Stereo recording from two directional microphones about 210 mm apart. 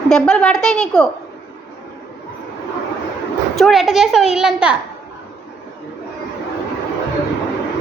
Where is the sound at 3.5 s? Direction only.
Centre (ahead or behind).